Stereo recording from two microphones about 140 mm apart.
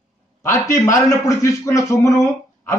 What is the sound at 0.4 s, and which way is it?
A man's voice, 20° left (ahead or behind).